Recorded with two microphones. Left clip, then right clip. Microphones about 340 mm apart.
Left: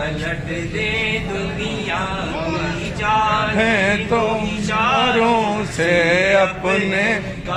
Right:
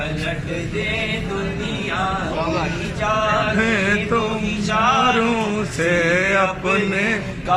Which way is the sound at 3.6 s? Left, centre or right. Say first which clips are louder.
Left 2 dB; centre.